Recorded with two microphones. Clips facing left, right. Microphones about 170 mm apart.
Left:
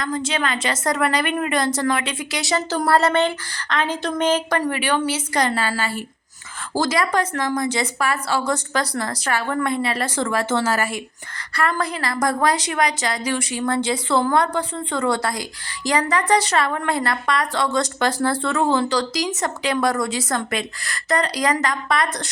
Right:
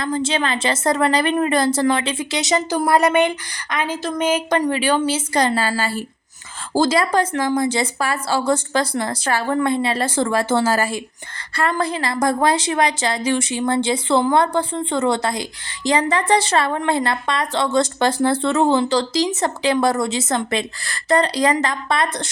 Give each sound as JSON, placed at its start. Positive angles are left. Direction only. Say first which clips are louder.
{"t": 0.0, "sound": "a woman's voice", "louder": "right 3 dB", "side_deg": -30}
{"t": 4.4, "sound": "a woman's voice", "louder": "right 3 dB", "side_deg": -20}